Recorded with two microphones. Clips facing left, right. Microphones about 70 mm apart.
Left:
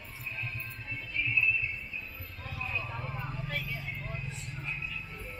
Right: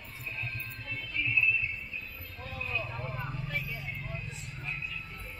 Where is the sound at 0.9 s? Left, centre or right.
Centre.